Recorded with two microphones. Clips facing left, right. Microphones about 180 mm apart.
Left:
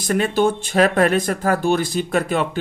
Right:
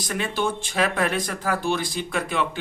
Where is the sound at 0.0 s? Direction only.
45° left (ahead or behind).